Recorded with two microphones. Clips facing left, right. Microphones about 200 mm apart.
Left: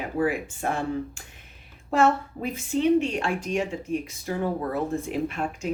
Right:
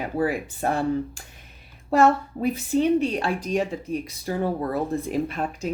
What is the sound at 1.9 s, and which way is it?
Speech, 35° right (ahead or behind).